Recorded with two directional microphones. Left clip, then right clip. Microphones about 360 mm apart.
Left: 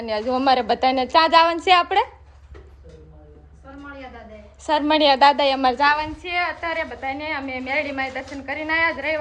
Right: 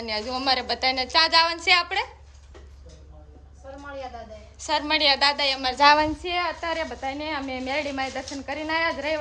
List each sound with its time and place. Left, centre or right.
0.0 s a woman's voice: centre
4.6 s a woman's voice: centre
5.7 s child singing: centre
6.2 s a woman's voice: centre